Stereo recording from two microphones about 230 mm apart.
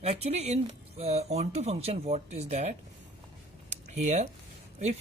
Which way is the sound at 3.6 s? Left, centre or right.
Right.